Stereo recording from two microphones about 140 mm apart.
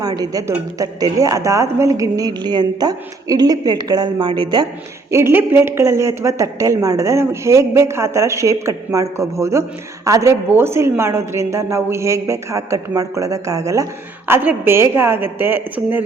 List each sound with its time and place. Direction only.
0.2 s a woman's voice: 25° right (ahead or behind)
5.1 s a woman's voice: 15° right (ahead or behind)